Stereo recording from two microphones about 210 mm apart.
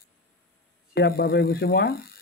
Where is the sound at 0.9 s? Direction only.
50° left (ahead or behind).